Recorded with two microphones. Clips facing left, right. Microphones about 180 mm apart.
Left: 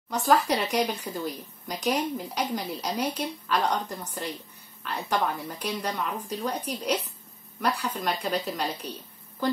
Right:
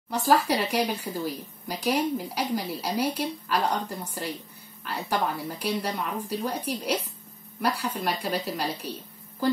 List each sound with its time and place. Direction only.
0.1 s speech: 10° right (ahead or behind)